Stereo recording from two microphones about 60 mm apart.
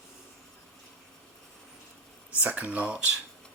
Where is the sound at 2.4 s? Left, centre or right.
Right.